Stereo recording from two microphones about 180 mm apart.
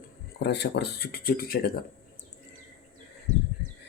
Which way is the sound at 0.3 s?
65° left (ahead or behind).